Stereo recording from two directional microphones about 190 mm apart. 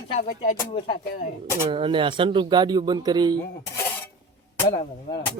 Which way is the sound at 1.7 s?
25° right (ahead or behind).